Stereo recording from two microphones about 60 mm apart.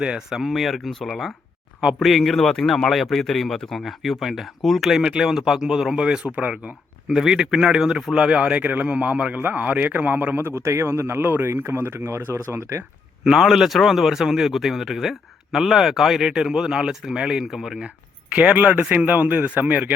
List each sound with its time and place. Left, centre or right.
0.3 s speech: centre; by 6.7 s right
7.1 s speech: centre; by 10.3 s right
10.3 s speech: right
10.6 s speech: right
12.5 s speech: right
13.2 s a man's voice: centre
18.3 s speech: right